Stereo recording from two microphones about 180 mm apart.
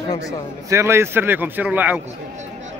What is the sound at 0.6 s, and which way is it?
Speech, 15° right (ahead or behind).